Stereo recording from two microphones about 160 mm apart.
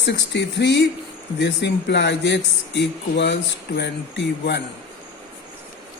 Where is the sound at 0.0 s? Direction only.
90° left.